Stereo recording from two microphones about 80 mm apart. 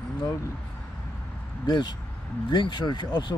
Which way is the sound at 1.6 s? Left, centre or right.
Left.